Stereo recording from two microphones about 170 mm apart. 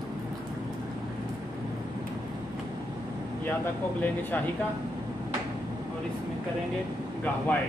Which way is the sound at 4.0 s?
10° left (ahead or behind).